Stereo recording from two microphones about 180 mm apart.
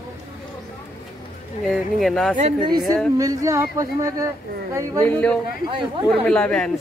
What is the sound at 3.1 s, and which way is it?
Speech, 20° right (ahead or behind).